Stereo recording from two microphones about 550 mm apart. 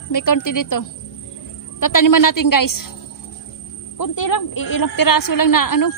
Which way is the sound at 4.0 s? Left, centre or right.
Left.